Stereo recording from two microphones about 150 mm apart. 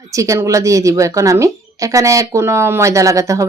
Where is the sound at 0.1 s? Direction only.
20° right (ahead or behind).